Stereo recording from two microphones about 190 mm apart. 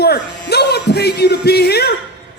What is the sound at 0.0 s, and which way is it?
Music, 55° left (ahead or behind).